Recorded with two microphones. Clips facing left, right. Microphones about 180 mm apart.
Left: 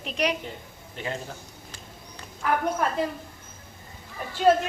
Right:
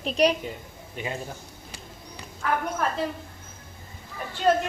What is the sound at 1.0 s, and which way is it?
Speech, 15° right (ahead or behind).